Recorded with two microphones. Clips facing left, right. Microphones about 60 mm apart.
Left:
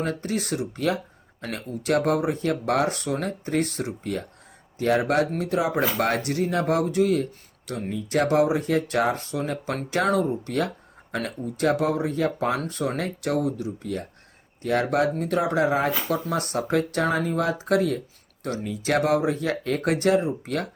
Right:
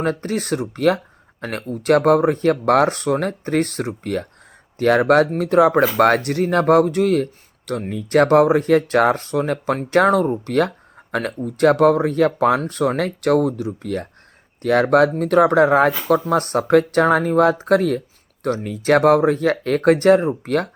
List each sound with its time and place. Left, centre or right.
0.0 s speech: right
16.3 s speech: right